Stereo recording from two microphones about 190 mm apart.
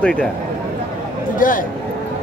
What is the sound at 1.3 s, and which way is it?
Speech, 45° left (ahead or behind).